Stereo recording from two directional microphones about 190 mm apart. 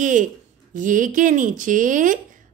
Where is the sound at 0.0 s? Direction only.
40° right (ahead or behind).